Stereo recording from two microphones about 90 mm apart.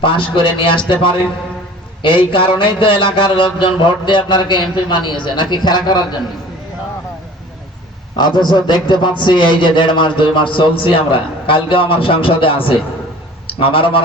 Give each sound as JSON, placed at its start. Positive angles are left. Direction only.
{"t": 0.0, "sound": "a man's voice", "side_deg": 70}
{"t": 8.2, "sound": "a man's voice", "side_deg": 55}